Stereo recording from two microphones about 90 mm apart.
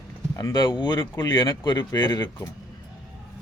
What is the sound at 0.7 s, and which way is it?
Speech, 55° left (ahead or behind).